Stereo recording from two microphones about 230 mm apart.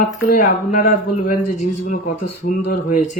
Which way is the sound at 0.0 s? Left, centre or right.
Left.